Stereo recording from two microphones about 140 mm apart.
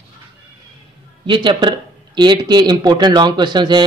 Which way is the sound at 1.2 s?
35° right (ahead or behind).